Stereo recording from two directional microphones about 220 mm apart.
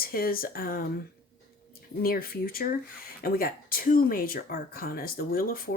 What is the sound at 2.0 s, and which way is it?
A woman's voice, 40° left (ahead or behind).